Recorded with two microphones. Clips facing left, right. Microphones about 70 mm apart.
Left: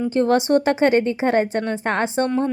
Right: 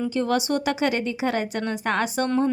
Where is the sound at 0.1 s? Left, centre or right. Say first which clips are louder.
Left 9 dB; left.